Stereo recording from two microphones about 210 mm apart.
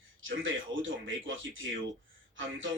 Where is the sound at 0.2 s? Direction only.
65° right (ahead or behind).